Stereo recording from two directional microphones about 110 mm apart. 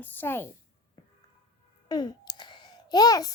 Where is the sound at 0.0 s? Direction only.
15° left (ahead or behind).